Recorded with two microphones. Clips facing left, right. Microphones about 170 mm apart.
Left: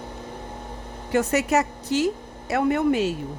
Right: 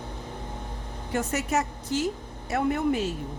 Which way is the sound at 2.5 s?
85° left.